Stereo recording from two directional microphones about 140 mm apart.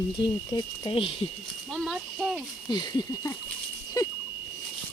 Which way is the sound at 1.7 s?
Centre (ahead or behind).